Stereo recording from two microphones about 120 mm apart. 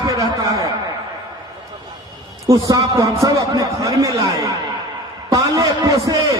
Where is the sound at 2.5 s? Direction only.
30° right (ahead or behind).